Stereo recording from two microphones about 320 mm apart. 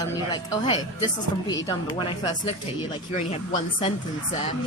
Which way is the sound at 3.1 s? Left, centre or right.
Centre.